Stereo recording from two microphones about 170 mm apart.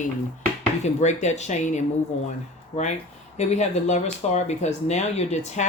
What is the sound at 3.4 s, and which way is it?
Speech, 40° left (ahead or behind).